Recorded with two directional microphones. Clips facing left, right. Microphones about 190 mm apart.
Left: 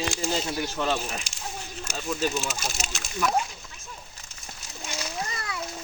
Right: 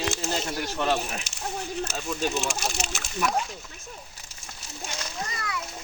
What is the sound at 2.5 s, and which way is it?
Speech, 65° right (ahead or behind).